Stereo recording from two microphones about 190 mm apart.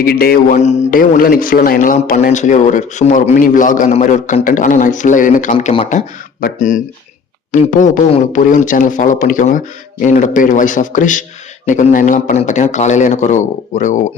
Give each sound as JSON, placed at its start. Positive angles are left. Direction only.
{"t": 0.0, "sound": "a man's voice", "side_deg": 50}
{"t": 5.5, "sound": "a man's voice", "side_deg": 30}
{"t": 6.4, "sound": "a man's voice", "side_deg": 40}